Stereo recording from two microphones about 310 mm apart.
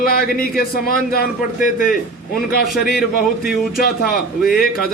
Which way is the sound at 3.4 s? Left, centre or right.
Left.